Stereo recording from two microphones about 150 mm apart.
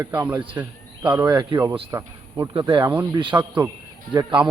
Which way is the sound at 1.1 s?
30° right (ahead or behind).